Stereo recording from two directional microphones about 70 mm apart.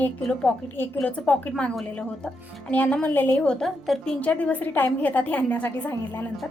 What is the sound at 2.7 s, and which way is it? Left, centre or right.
Speech, left.